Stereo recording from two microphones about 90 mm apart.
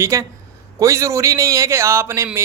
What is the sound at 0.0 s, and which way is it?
Speech, 35° right (ahead or behind).